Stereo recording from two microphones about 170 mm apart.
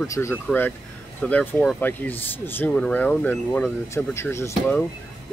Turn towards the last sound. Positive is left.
turn(degrees=15)  # may be behind; listen again after turning